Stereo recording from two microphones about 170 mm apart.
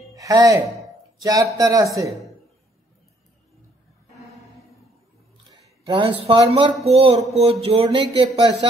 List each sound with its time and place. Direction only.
0.1 s speech: 20° right (ahead or behind)
5.9 s speech: 30° right (ahead or behind)